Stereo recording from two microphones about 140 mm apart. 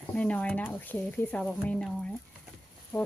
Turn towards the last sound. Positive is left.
turn(degrees=20)  # may be behind; listen again after turning